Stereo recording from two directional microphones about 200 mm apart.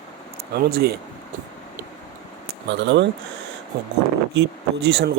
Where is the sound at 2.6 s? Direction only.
60° right (ahead or behind).